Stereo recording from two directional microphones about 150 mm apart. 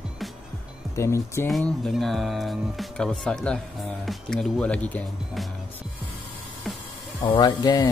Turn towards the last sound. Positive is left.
turn(degrees=30)  # may be behind; listen again after turning